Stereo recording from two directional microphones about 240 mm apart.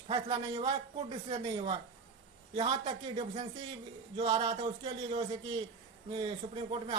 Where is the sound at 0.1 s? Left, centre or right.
Centre.